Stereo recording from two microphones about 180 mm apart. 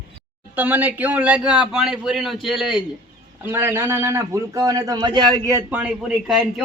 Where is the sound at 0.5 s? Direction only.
10° right (ahead or behind).